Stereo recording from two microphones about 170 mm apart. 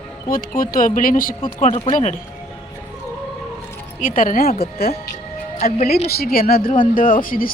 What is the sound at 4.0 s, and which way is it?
Speech, 55° left (ahead or behind).